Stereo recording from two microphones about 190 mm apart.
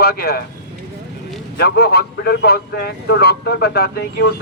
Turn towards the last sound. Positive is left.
turn(degrees=55)  # may be behind; listen again after turning